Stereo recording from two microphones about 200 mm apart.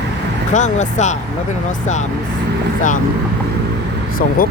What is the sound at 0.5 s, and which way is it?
Speech, 35° left (ahead or behind).